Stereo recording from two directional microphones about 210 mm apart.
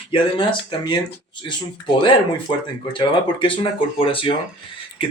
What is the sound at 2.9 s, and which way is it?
Speech, 25° left (ahead or behind).